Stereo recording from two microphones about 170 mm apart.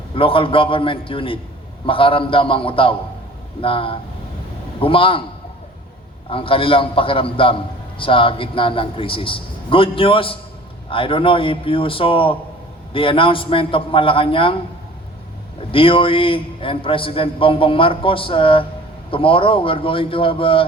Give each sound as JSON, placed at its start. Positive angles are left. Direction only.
{"t": 0.1, "sound": "a man's voice", "side_deg": 30}
{"t": 6.3, "sound": "a man's voice", "side_deg": 30}
{"t": 15.7, "sound": "a man's voice", "side_deg": 30}